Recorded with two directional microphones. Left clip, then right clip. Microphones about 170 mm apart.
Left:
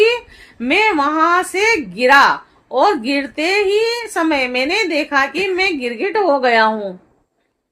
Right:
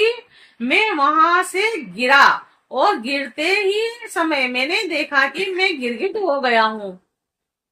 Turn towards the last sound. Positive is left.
turn(degrees=45)  # may be behind; listen again after turning